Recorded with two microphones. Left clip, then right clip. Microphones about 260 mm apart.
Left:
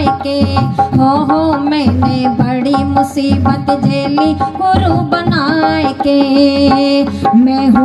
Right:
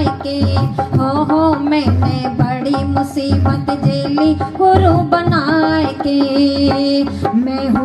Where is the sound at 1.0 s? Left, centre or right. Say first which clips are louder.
Left 1 dB; left.